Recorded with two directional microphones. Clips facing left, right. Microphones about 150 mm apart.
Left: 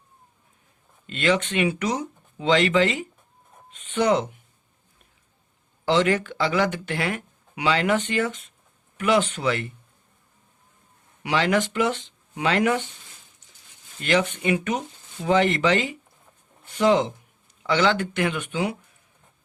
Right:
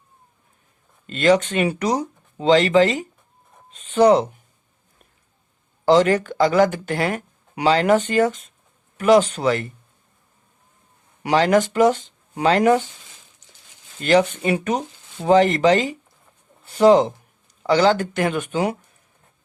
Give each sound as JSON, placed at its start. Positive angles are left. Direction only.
{"t": 1.0, "sound": "speech", "side_deg": -40}
{"t": 5.8, "sound": "speech", "side_deg": -40}
{"t": 11.2, "sound": "speech", "side_deg": -40}
{"t": 14.0, "sound": "speech", "side_deg": -35}